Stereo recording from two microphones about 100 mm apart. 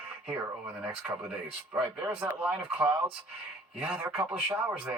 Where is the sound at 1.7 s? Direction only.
10° right (ahead or behind).